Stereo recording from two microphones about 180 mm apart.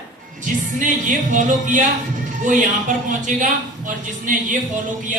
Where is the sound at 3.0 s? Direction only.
45° right (ahead or behind).